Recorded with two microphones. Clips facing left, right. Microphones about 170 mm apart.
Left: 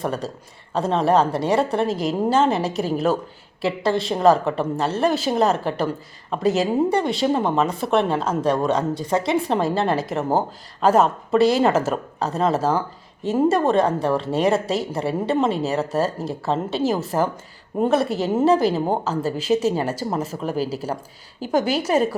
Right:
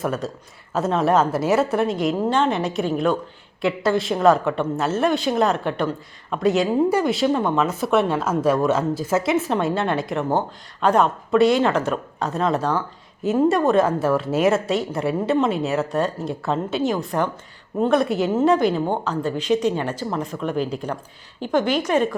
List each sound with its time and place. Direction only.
0.0 s a woman's voice: centre (ahead or behind)
20.3 s speech: 35° left (ahead or behind)
20.7 s a woman's voice: 5° left (ahead or behind)